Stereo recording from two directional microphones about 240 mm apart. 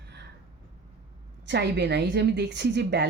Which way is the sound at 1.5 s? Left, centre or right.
Right.